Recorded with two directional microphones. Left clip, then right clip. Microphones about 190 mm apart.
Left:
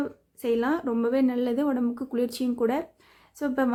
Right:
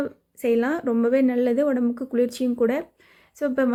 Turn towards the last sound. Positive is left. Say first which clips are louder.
# right 4 dB
turn(degrees=-10)  # may be behind; listen again after turning